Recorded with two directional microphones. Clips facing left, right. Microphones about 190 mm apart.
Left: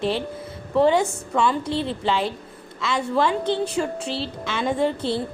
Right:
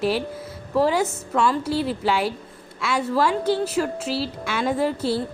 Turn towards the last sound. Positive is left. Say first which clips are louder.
# even
turn(degrees=-5)  # may be behind; listen again after turning